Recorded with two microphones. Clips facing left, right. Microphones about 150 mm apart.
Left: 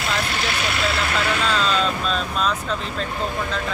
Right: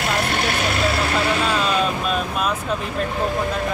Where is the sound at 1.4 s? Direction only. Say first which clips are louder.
Right 1 dB; 10° right (ahead or behind).